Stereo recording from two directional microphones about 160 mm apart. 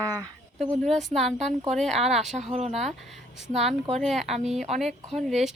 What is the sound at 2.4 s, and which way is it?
Speech, 45° right (ahead or behind).